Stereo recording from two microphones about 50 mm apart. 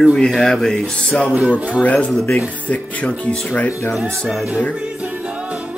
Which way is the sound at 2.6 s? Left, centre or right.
Left.